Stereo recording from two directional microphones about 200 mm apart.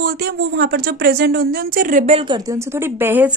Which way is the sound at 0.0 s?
50° right (ahead or behind).